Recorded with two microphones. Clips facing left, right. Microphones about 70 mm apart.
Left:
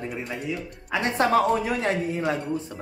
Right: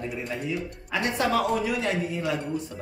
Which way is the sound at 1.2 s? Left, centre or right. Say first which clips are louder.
Left 4 dB; left.